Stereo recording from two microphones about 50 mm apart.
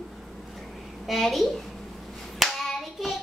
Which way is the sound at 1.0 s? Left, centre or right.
Centre.